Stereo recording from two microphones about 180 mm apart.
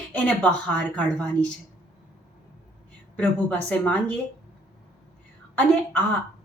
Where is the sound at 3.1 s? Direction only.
10° left (ahead or behind).